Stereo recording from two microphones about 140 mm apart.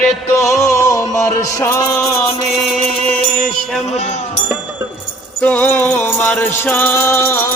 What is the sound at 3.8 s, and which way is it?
Speech, 50° left (ahead or behind).